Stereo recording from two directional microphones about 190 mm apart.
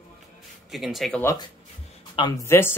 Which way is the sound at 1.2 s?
15° left (ahead or behind).